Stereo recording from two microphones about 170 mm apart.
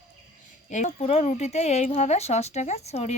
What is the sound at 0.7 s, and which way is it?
A woman's voice, 45° left (ahead or behind).